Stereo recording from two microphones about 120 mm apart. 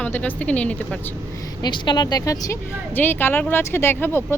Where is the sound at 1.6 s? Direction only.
40° left (ahead or behind).